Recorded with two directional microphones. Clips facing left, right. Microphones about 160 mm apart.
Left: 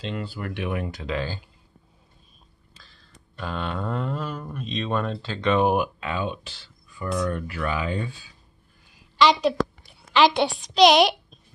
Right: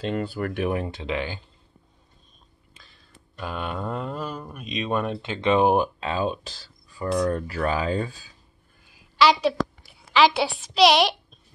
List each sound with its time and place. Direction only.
0.0 s speech: 50° right (ahead or behind)
0.7 s speech: 30° right (ahead or behind)
2.8 s speech: centre (ahead or behind)
5.4 s speech: 30° right (ahead or behind)
8.9 s a sound: 5° right (ahead or behind)
10.1 s a woman's voice: centre (ahead or behind)